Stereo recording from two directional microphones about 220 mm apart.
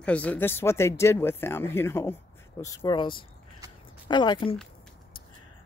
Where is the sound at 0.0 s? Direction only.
5° left (ahead or behind); by 4.6 s 20° left (ahead or behind).